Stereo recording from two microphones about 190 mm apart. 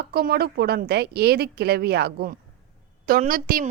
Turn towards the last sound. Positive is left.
turn(degrees=-50)  # may be behind; listen again after turning